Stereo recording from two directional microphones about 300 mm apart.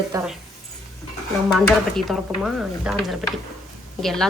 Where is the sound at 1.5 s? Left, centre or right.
Centre.